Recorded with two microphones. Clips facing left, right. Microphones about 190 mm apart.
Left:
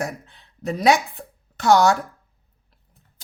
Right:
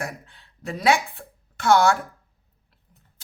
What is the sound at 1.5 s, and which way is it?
Speech, 40° left (ahead or behind).